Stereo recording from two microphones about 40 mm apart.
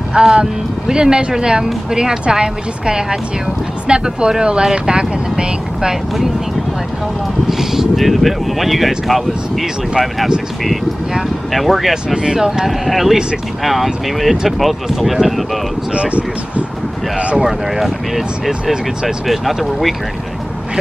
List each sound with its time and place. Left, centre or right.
0.1 s speech: right
7.4 s speech: centre
7.9 s speech: centre
11.5 s speech: centre
11.9 s speech: centre
15.9 s speech: right
17.4 s speech: centre